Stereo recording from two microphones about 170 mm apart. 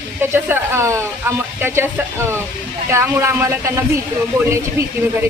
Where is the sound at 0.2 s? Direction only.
10° right (ahead or behind).